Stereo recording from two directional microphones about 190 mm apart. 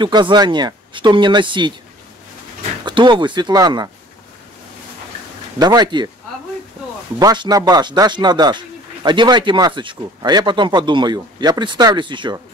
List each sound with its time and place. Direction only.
0.0 s speech: 25° right (ahead or behind)
2.8 s speech: 25° right (ahead or behind)
5.6 s speech: 20° right (ahead or behind)
7.2 s speech: 20° right (ahead or behind)